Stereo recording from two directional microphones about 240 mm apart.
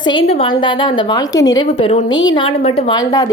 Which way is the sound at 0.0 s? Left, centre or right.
Left.